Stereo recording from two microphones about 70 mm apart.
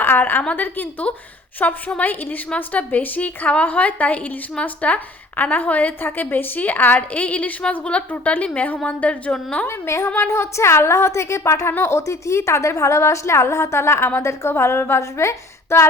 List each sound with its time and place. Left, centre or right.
0.0 s a sound: left
0.5 s a woman's voice: left
9.6 s a woman's voice: left